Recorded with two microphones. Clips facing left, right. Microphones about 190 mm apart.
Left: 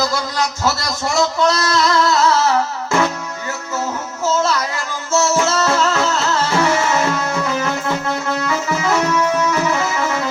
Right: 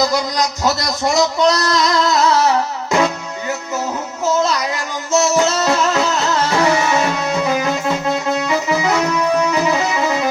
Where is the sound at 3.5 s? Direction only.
15° right (ahead or behind).